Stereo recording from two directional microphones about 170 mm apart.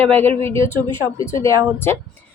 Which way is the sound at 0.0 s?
10° left (ahead or behind).